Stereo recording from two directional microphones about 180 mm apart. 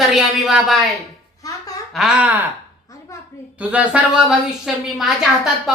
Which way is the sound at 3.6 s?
10° right (ahead or behind).